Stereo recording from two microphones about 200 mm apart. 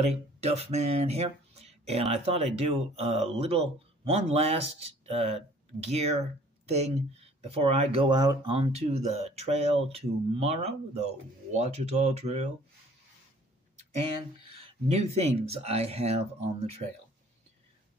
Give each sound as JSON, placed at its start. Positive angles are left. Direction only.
{"t": 0.0, "sound": "speech", "side_deg": -30}
{"t": 14.9, "sound": "speech", "side_deg": -30}